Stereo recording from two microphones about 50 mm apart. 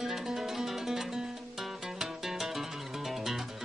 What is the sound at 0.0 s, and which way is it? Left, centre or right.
Music, centre.